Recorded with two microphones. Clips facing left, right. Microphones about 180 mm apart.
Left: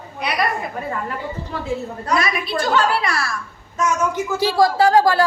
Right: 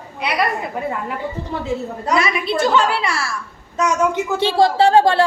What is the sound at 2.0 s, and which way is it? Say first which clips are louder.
A woman's voice: right 3 dB; 25° right (ahead or behind).